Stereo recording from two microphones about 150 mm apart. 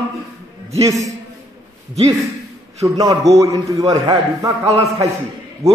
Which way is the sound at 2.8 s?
25° right (ahead or behind).